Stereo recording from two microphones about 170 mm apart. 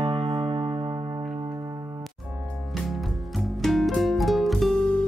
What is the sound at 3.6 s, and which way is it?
Music, centre (ahead or behind).